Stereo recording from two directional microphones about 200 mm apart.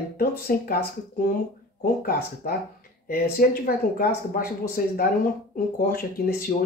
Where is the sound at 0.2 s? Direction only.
50° left (ahead or behind).